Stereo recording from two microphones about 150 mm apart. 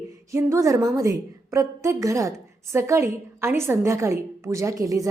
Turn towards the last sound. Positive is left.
turn(degrees=-20)  # may be behind; listen again after turning